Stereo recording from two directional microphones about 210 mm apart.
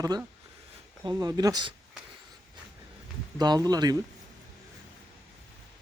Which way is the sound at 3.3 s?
20° right (ahead or behind).